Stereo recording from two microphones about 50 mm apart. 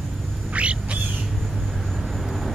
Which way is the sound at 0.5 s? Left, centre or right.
Right.